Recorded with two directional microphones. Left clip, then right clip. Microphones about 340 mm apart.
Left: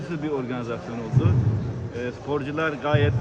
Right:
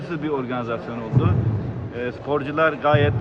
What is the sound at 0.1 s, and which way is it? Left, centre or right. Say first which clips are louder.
Speech: right 3 dB; centre.